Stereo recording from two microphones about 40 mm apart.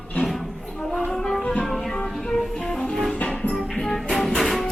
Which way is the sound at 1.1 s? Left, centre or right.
Centre.